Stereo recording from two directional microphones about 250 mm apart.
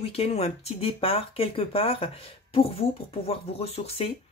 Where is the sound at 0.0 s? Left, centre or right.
Left.